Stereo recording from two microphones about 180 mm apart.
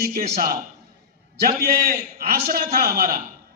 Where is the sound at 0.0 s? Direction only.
55° right (ahead or behind).